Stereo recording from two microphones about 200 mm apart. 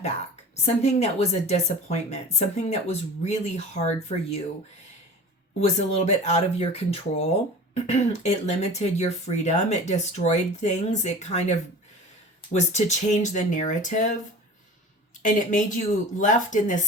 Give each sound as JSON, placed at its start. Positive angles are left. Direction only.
{"t": 0.6, "sound": "speech", "side_deg": 35}
{"t": 5.5, "sound": "speech", "side_deg": 35}
{"t": 15.2, "sound": "speech", "side_deg": 40}